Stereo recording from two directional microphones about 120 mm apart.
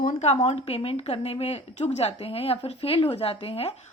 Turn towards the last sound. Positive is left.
turn(degrees=55)  # may be behind; listen again after turning